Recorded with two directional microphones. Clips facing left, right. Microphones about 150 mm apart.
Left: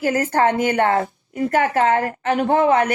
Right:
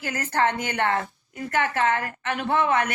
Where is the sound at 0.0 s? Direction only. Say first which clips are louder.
Left 7 dB; 40° left (ahead or behind).